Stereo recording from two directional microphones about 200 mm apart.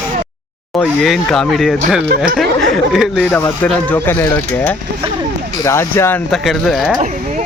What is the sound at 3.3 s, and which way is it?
Speech, 10° left (ahead or behind).